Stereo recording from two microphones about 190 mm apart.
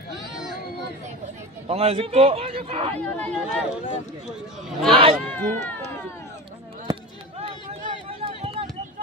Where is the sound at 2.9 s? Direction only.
10° left (ahead or behind).